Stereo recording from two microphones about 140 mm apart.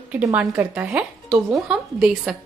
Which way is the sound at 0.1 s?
10° right (ahead or behind).